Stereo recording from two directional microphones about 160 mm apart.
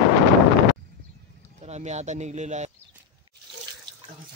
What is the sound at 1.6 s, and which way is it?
Speech, 45° right (ahead or behind).